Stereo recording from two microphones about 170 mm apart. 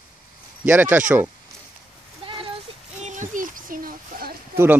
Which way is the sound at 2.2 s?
35° right (ahead or behind).